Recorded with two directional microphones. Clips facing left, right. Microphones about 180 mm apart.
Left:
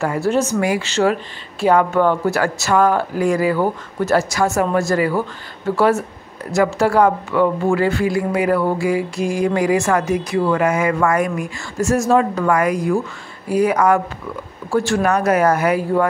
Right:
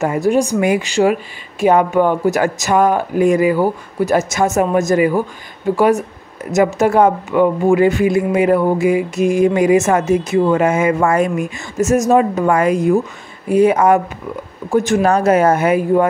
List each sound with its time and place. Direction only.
0.0 s a woman's voice: 15° right (ahead or behind)